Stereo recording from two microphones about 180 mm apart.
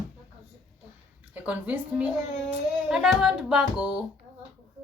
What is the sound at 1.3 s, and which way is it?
A woman's voice, 10° right (ahead or behind).